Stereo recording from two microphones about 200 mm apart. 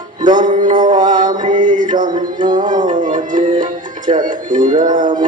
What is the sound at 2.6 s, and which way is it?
Music, 40° right (ahead or behind).